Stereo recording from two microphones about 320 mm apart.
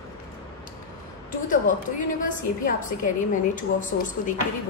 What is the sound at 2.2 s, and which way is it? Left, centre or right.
Speech, left.